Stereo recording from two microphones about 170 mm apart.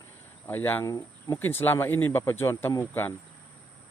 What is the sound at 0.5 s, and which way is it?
Speech, 10° left (ahead or behind).